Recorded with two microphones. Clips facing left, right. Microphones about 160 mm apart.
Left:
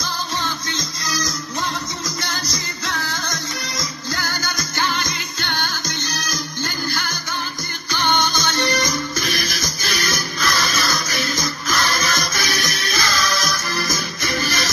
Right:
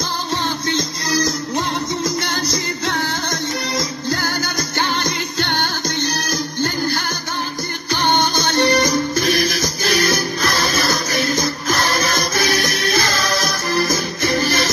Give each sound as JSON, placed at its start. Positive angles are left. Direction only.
{"t": 0.7, "sound": "music", "side_deg": -60}
{"t": 4.1, "sound": "music", "side_deg": -30}
{"t": 4.6, "sound": "music", "side_deg": -55}
{"t": 8.5, "sound": "music", "side_deg": -60}
{"t": 10.0, "sound": "music", "side_deg": -30}